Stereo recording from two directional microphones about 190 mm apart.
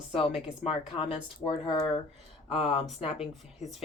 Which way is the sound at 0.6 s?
30° left (ahead or behind).